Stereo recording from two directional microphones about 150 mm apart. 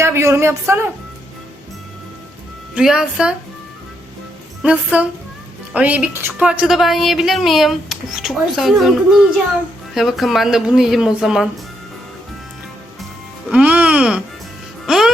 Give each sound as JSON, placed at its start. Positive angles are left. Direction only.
{"t": 0.0, "sound": "speech", "side_deg": -20}
{"t": 2.7, "sound": "a woman's voice", "side_deg": -5}
{"t": 4.6, "sound": "a woman's voice", "side_deg": -10}
{"t": 13.5, "sound": "speech", "side_deg": -10}
{"t": 14.8, "sound": "music", "side_deg": 0}